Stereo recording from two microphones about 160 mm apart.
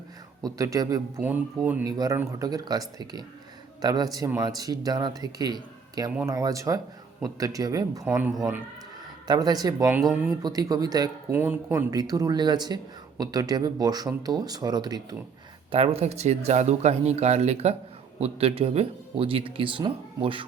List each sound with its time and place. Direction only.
0.4 s speech: 25° right (ahead or behind)
1.2 s speech: 10° right (ahead or behind)
1.8 s speech: 25° right (ahead or behind)
8.0 s speech: 10° right (ahead or behind)
9.2 s speech: 25° right (ahead or behind)
10.0 s speech: centre (ahead or behind)
10.4 s speech: 25° right (ahead or behind)
11.3 s speech: 15° right (ahead or behind)
15.7 s speech: 35° right (ahead or behind)